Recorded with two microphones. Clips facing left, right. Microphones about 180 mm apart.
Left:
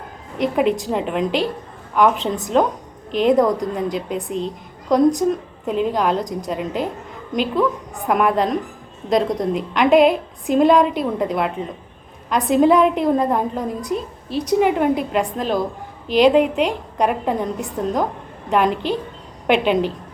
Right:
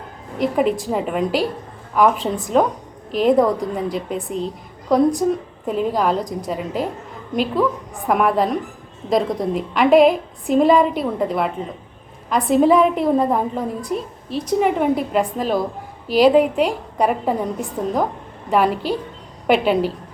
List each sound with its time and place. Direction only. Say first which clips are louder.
0.3 s a woman's voice: even; centre (ahead or behind)